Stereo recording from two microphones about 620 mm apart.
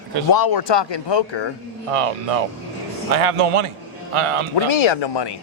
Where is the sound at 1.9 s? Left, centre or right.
Right.